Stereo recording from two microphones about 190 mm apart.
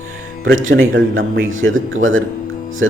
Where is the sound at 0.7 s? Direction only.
90° right.